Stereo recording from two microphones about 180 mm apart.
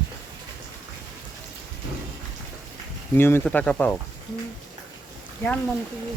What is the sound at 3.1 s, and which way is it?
Speech, 10° left (ahead or behind).